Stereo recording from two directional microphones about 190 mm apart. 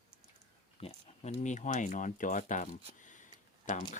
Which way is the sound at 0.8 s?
40° left (ahead or behind).